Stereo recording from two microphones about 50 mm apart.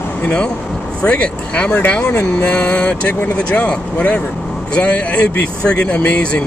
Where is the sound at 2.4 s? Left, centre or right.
Left.